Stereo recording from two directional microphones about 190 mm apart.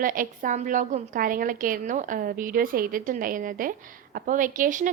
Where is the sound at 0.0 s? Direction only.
45° right (ahead or behind).